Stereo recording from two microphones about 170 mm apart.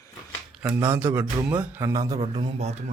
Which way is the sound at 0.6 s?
10° right (ahead or behind).